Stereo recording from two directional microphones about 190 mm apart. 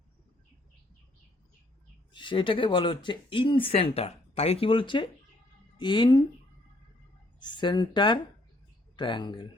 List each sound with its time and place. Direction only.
2.1 s speech: 25° left (ahead or behind)
7.3 s speech: 25° left (ahead or behind)